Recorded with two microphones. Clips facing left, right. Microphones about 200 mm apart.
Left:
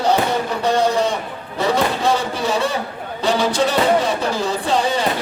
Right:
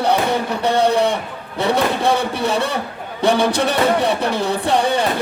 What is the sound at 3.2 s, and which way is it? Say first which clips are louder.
A man's voice: right 2 dB; 60° right (ahead or behind).